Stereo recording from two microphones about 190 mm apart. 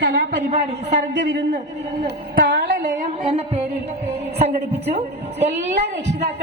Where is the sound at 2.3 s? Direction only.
50° right (ahead or behind).